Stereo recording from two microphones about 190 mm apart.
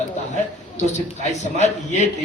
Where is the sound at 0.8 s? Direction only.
40° left (ahead or behind).